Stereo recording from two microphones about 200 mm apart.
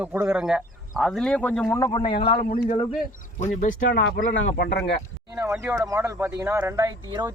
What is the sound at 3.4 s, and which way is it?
Speech, 40° left (ahead or behind).